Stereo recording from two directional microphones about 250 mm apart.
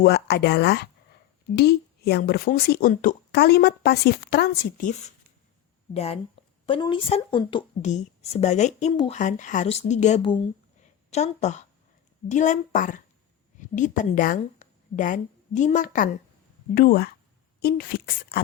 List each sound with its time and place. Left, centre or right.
0.0 s a woman's voice: left